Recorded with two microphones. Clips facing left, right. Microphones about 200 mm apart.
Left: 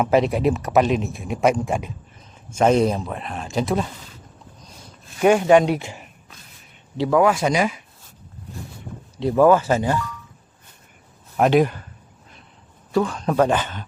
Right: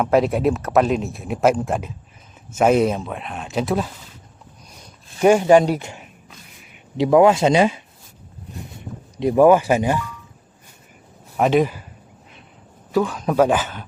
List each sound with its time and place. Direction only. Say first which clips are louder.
0.0 s speech: right 1 dB; centre (ahead or behind)
5.2 s speech: right 1 dB; 5° right (ahead or behind)
6.9 s speech: right 4 dB; 20° right (ahead or behind)
9.1 s speech: right 2 dB; 15° right (ahead or behind)
11.3 s speech: even; centre (ahead or behind)
12.9 s speech: right 1 dB; 5° right (ahead or behind)